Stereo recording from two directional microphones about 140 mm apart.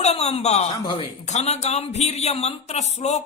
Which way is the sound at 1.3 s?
50° left (ahead or behind).